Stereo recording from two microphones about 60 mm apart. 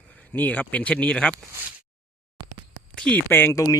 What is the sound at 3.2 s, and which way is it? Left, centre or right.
Speech, left.